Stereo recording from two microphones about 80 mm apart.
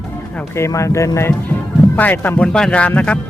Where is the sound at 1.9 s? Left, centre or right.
Left.